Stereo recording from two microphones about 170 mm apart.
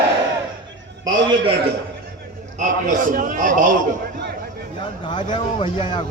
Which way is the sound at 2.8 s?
50° right (ahead or behind).